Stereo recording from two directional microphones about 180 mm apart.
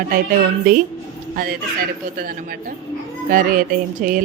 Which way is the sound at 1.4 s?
55° right (ahead or behind).